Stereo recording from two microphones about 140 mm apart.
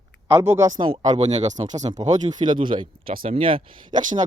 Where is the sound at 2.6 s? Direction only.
35° right (ahead or behind).